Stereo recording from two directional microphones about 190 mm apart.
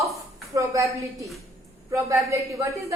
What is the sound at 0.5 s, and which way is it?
Speech, 15° right (ahead or behind).